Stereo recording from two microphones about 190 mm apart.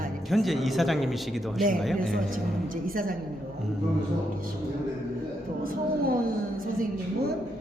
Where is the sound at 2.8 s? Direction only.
50° right (ahead or behind).